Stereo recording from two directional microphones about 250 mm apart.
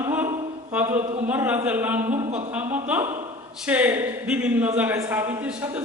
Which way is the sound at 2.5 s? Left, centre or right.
Centre.